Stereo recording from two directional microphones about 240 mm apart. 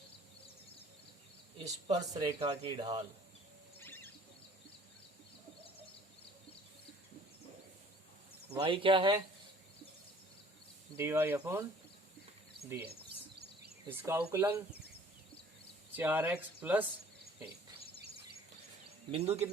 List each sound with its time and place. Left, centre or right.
2.1 s speech: centre
3.8 s a sound: centre
8.5 s speech: right
10.9 s speech: centre
12.6 s speech: centre
13.9 s speech: centre
16.0 s speech: centre
19.1 s speech: right